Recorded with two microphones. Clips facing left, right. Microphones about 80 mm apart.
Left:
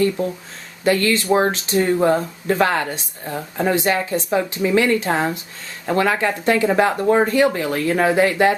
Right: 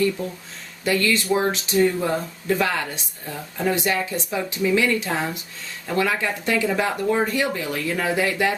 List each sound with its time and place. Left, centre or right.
0.9 s speech: left